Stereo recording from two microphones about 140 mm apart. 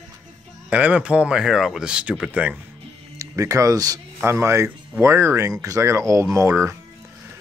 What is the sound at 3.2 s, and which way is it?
Speech, 20° right (ahead or behind).